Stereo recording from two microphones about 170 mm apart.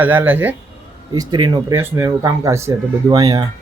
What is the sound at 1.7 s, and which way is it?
Speech, 15° right (ahead or behind).